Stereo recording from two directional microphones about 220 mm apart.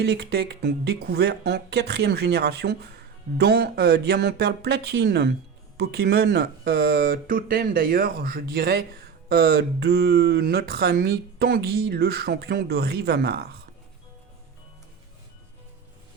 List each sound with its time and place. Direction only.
0.0 s speech: 50° right (ahead or behind)